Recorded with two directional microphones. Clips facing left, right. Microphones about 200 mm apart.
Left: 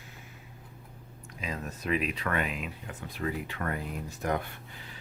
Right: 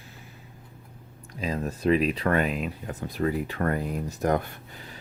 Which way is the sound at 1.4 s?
35° right (ahead or behind).